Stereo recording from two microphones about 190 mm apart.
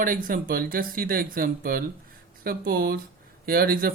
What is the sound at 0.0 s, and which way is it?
Speech, 45° right (ahead or behind).